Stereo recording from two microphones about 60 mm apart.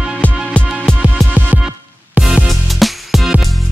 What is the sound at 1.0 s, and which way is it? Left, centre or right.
Music, centre.